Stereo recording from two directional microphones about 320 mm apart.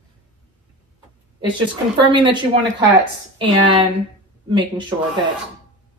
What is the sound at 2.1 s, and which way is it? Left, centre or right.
Speech, centre.